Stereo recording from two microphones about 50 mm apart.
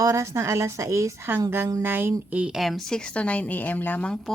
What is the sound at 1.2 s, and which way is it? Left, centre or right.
A woman's voice, right.